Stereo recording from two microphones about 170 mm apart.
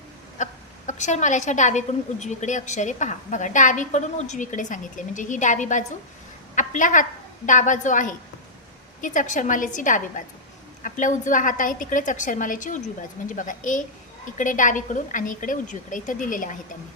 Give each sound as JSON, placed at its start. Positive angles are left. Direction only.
{"t": 0.4, "sound": "a woman's voice", "side_deg": 45}